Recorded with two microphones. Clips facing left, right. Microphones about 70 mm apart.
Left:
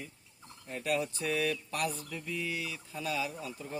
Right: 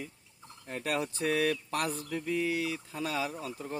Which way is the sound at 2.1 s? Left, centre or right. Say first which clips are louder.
Right 6 dB; right.